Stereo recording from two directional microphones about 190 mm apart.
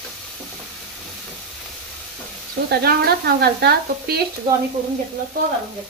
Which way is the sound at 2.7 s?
55° right (ahead or behind).